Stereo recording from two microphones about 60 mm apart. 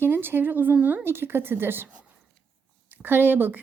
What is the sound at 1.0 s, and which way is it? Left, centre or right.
Speech, right.